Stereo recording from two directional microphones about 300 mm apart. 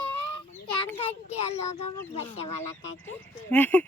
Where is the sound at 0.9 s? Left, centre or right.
Centre.